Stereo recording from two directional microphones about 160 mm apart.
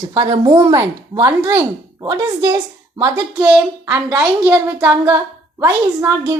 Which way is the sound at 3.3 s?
5° right (ahead or behind).